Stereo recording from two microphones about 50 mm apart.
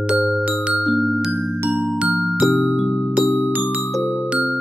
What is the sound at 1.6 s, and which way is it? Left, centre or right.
Music, centre.